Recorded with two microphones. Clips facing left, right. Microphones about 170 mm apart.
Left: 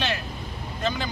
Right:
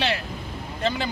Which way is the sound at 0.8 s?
30° right (ahead or behind).